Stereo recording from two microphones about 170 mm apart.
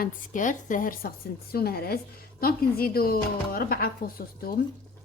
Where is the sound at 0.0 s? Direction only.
50° left (ahead or behind).